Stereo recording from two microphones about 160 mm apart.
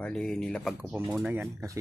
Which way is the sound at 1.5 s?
20° right (ahead or behind).